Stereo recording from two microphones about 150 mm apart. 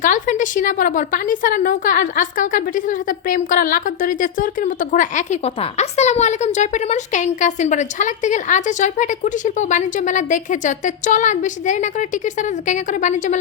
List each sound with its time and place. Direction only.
0.0 s a woman's voice: 60° left (ahead or behind)